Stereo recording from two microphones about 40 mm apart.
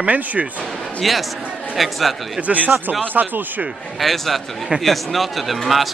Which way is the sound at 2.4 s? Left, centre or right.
Right.